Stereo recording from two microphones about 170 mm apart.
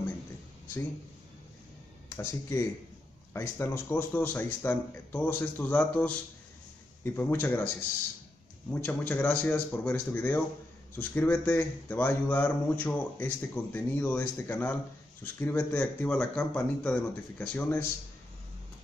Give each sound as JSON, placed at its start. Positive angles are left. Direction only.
{"t": 2.0, "sound": "speech", "side_deg": 15}
{"t": 7.2, "sound": "speech", "side_deg": 10}